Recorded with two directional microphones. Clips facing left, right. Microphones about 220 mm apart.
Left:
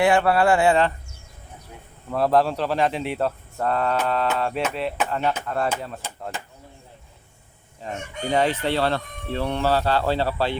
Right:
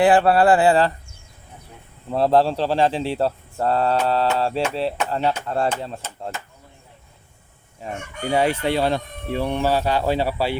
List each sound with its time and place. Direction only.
0.0 s speech: 35° right (ahead or behind)
2.1 s speech: 25° right (ahead or behind)
7.8 s speech: 10° right (ahead or behind)